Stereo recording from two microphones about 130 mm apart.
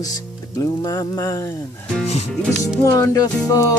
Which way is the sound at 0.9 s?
25° left (ahead or behind).